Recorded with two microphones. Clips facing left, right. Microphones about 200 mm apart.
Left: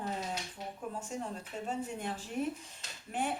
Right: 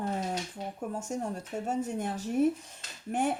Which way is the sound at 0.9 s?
45° right (ahead or behind).